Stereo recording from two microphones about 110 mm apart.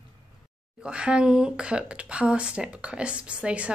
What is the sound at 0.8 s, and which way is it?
A woman's voice, 10° right (ahead or behind).